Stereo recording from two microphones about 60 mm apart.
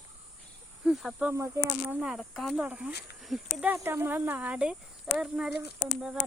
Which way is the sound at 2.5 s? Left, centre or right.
Centre.